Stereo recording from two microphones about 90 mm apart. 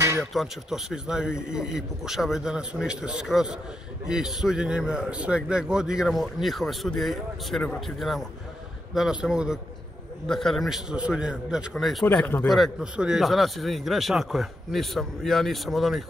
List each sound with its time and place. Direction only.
0.2 s a man's voice: centre (ahead or behind)
10.2 s speech: 5° left (ahead or behind)
11.7 s speech: centre (ahead or behind)
12.2 s a man's voice: 20° left (ahead or behind)
12.4 s speech: centre (ahead or behind)
12.8 s speech: 10° right (ahead or behind)